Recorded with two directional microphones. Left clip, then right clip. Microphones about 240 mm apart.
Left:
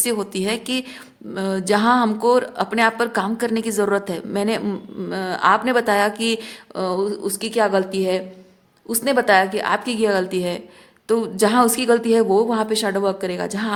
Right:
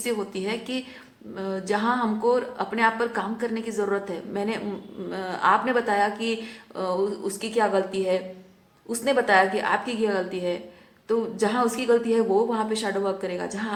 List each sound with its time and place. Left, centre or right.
0.0 s a woman's voice: left